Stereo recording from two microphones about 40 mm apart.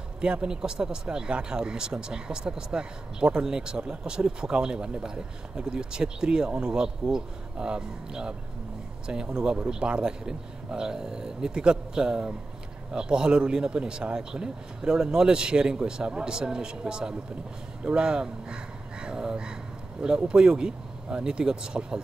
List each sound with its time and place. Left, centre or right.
0.2 s speech: right